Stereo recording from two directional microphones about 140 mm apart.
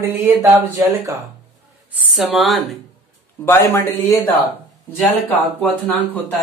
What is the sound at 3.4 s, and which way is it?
Speech, 15° left (ahead or behind).